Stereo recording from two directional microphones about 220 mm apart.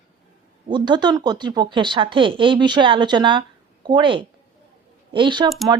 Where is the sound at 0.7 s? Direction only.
20° right (ahead or behind).